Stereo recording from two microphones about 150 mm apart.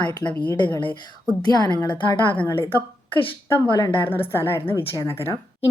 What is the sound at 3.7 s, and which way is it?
Speech, 30° left (ahead or behind).